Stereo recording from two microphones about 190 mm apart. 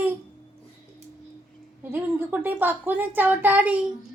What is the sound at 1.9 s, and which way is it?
A woman's voice, 10° right (ahead or behind).